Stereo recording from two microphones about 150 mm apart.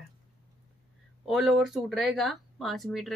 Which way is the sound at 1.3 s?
Centre (ahead or behind).